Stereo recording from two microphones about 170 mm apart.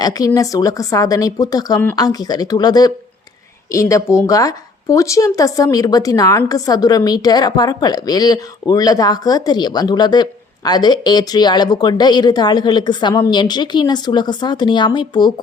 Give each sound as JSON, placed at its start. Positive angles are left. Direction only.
{"t": 0.3, "sound": "a woman's voice", "side_deg": 20}